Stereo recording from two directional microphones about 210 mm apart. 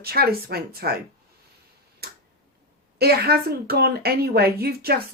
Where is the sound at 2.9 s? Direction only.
50° right (ahead or behind).